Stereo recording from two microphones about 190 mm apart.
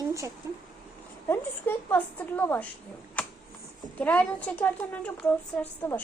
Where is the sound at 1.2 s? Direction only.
15° left (ahead or behind).